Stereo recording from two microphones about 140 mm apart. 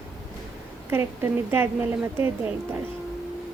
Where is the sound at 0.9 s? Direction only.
15° right (ahead or behind).